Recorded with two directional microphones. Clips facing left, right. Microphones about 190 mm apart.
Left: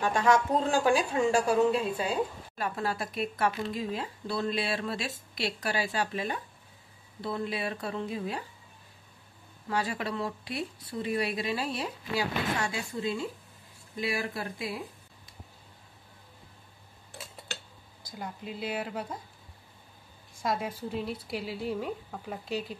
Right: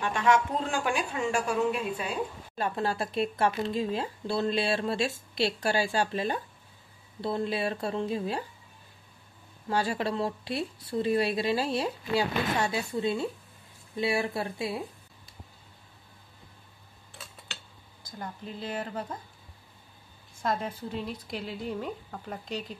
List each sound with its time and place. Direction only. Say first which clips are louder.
0.0 s speech: left 1 dB; 40° left (ahead or behind)
2.5 s speech: right 5 dB; 25° right (ahead or behind)
9.7 s speech: right 3 dB; 30° right (ahead or behind)
18.2 s speech: left 1 dB; 10° left (ahead or behind)
20.4 s speech: even; 10° left (ahead or behind)